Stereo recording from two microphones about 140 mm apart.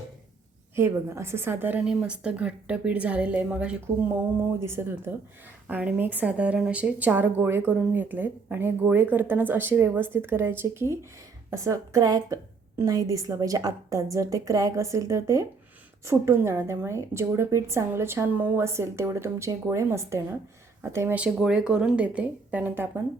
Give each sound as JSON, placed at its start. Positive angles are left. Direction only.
{"t": 0.8, "sound": "a woman's voice", "side_deg": -20}
{"t": 21.2, "sound": "speech", "side_deg": -5}